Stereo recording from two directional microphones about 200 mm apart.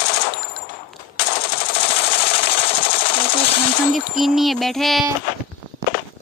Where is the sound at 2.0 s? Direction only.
30° left (ahead or behind).